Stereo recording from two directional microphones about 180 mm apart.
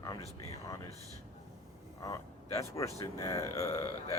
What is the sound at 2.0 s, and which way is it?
Speech, 20° left (ahead or behind).